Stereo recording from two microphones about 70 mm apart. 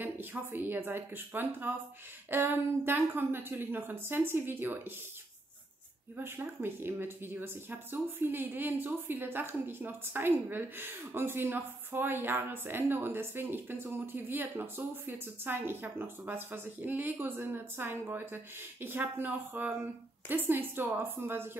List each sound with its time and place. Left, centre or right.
0.0 s speech: right
6.1 s speech: right